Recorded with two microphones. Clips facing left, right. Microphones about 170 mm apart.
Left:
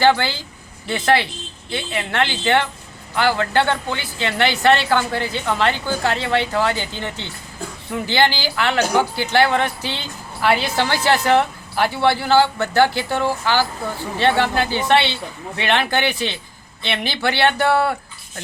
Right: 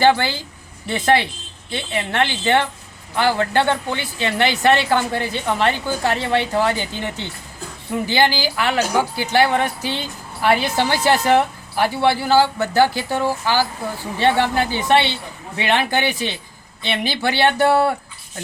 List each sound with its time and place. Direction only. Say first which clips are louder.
0.0 s speech: right 1 dB; 15° right (ahead or behind)